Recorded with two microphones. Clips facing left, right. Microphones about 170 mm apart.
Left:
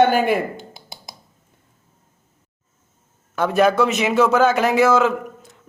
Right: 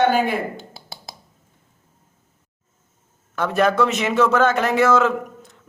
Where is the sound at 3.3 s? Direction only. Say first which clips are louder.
Left 2 dB; 5° left (ahead or behind).